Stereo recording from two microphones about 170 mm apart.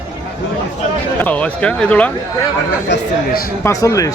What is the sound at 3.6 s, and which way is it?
Speech, 20° left (ahead or behind).